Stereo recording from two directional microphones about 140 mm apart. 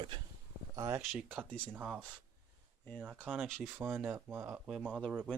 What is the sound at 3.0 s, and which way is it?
Speech, 10° right (ahead or behind).